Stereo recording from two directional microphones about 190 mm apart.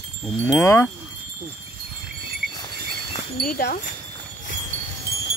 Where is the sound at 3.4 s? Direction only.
55° left (ahead or behind).